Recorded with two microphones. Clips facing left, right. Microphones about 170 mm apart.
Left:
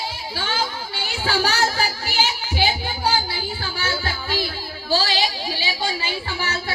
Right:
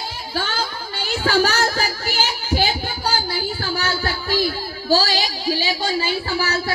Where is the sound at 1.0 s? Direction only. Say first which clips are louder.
Right 5 dB; 45° right (ahead or behind).